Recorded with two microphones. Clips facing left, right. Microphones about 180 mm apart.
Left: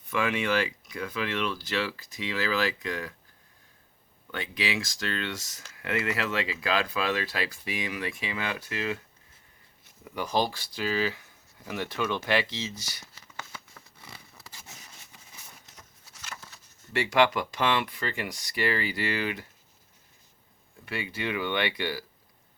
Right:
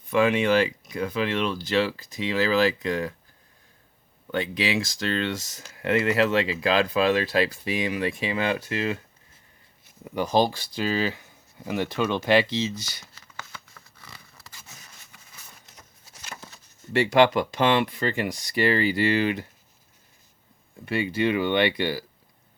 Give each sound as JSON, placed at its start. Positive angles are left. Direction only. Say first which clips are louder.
{"t": 0.1, "sound": "speech", "louder": "right 7 dB", "side_deg": -25}
{"t": 4.3, "sound": "speech", "louder": "right 6 dB", "side_deg": -30}
{"t": 10.0, "sound": "speech", "louder": "right 6 dB", "side_deg": -25}
{"t": 13.1, "sound": "a sound", "louder": "even", "side_deg": 15}
{"t": 16.2, "sound": "a sound", "louder": "right 3 dB", "side_deg": -25}
{"t": 16.9, "sound": "speech", "louder": "right 5 dB", "side_deg": -30}
{"t": 20.8, "sound": "speech", "louder": "right 9 dB", "side_deg": -25}